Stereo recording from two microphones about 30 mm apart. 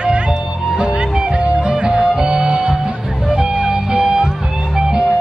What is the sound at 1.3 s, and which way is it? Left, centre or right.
Music, right.